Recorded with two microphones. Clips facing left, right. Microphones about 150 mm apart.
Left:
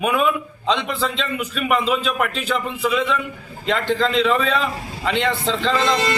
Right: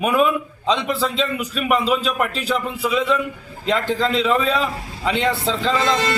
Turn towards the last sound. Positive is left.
turn(degrees=-5)  # may be behind; listen again after turning